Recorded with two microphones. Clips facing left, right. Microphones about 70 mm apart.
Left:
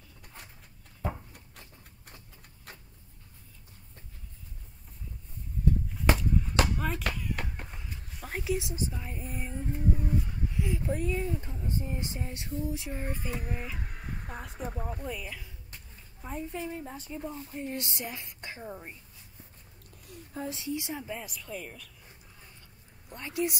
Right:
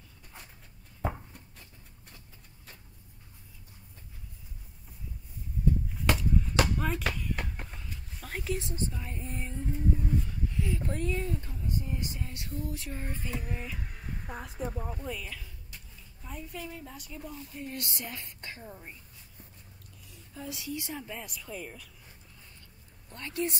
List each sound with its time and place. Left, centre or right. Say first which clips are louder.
6.1 s a sound: even; centre
10.9 s music: left 2 dB; centre
11.6 s music: even; left
12.6 s music: left 3 dB; centre
14.2 s speech: right 3 dB; centre
15.7 s a woman's voice: even; left; by 18.9 s centre
20.1 s a sound: left 6 dB; left
20.4 s music: left 2 dB; left
20.9 s speech: left 2 dB; centre
23.0 s music: left 2 dB; centre